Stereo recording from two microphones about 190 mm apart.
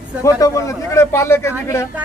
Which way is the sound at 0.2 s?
15° left (ahead or behind).